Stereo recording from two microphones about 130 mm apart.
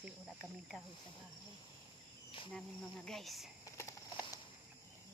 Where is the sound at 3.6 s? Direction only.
25° left (ahead or behind).